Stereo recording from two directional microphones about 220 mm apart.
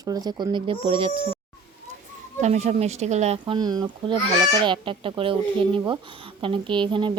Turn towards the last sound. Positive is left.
turn(degrees=-20)  # may be behind; listen again after turning